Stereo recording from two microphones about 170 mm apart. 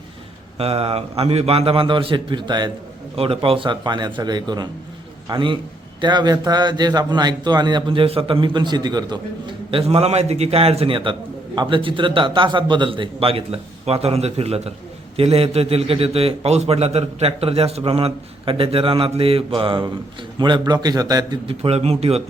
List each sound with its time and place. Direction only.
0.6 s a man's voice: 35° right (ahead or behind)